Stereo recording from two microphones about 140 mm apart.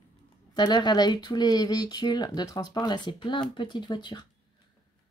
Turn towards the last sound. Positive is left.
turn(degrees=35)  # may be behind; listen again after turning